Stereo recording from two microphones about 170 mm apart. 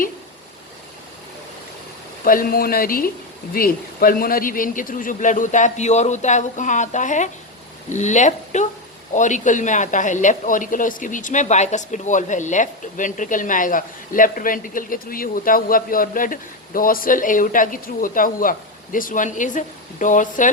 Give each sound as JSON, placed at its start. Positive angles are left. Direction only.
{"t": 2.2, "sound": "speech", "side_deg": 55}